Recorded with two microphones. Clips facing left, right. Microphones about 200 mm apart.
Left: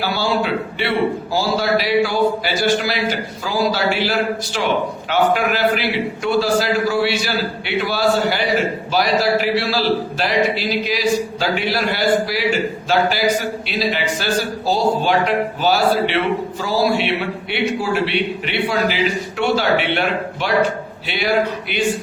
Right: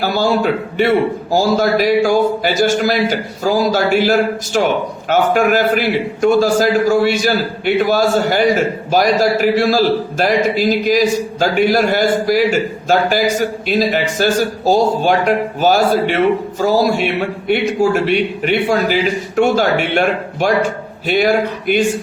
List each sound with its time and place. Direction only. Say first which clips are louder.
0.0 s a man's voice: right 5 dB; 45° right (ahead or behind)